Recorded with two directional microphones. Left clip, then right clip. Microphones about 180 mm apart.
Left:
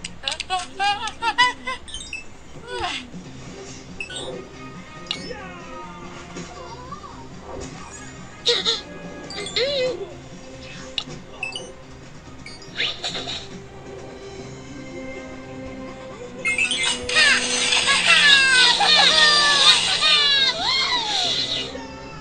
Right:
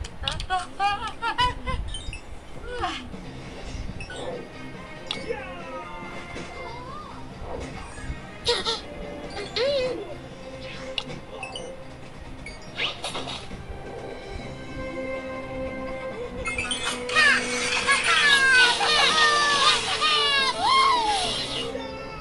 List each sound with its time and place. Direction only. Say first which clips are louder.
0.3 s a sound: left 2 dB; 5° left (ahead or behind)
8.5 s music: left 5 dB; 15° right (ahead or behind)
12.7 s music: left 4 dB; 15° right (ahead or behind)
16.4 s music: left 8 dB; 5° left (ahead or behind)
18.6 s children playing: left 4 dB; 15° right (ahead or behind)
19.9 s music: left 5 dB; 15° right (ahead or behind)